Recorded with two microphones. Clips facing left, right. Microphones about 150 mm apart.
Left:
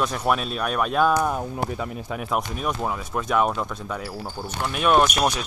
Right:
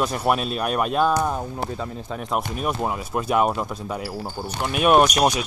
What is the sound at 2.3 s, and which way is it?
Speech, 5° right (ahead or behind).